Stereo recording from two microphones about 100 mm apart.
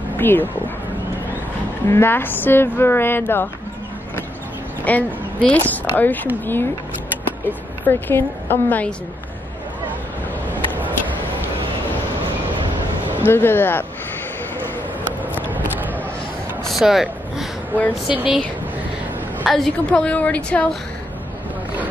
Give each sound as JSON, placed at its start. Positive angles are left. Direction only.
{"t": 0.2, "sound": "speech", "side_deg": 20}
{"t": 1.9, "sound": "speech", "side_deg": 20}
{"t": 4.8, "sound": "a woman's voice", "side_deg": 15}
{"t": 13.2, "sound": "speech", "side_deg": 20}
{"t": 15.5, "sound": "a sound", "side_deg": -15}
{"t": 16.6, "sound": "a sound", "side_deg": 0}
{"t": 18.0, "sound": "speech", "side_deg": -10}
{"t": 19.4, "sound": "a woman's voice", "side_deg": 0}
{"t": 19.9, "sound": "a woman's voice", "side_deg": 15}